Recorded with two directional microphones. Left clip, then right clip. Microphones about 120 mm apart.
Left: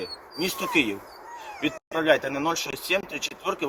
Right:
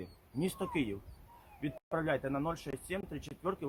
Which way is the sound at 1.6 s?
35° right (ahead or behind).